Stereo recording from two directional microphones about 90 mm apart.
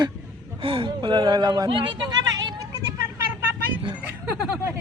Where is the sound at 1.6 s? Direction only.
70° right (ahead or behind); by 2.7 s 50° right (ahead or behind).